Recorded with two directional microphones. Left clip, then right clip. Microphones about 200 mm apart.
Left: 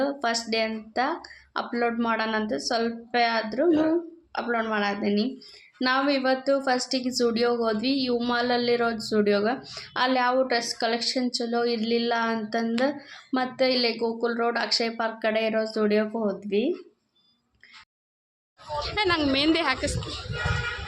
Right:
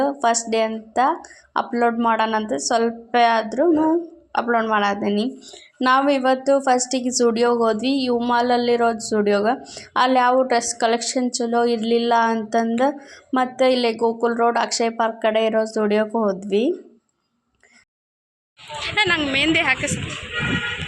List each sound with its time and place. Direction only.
0.0 s a woman's voice: 10° right (ahead or behind)
18.9 s a woman's voice: 15° left (ahead or behind)